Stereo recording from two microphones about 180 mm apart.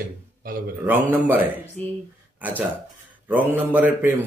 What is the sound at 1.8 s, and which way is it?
Speech, 5° left (ahead or behind).